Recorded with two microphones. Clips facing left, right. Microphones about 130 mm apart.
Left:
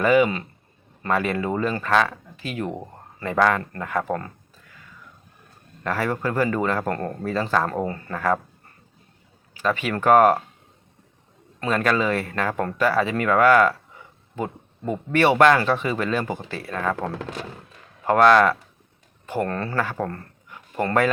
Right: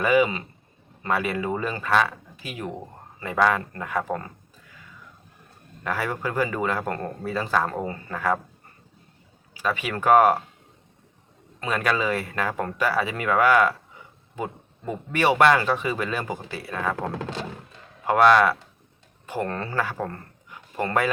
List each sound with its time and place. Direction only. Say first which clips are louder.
0.0 s speech: left 2 dB; 10° right (ahead or behind)
5.8 s speech: left 3 dB; 10° right (ahead or behind)
9.6 s speech: left 3 dB; 10° right (ahead or behind)
11.6 s speech: left 3 dB; 10° right (ahead or behind)
15.1 s speech: left 2 dB; 10° right (ahead or behind)
18.0 s speech: left 2 dB; 10° right (ahead or behind)
19.3 s speech: left 3 dB; 20° right (ahead or behind)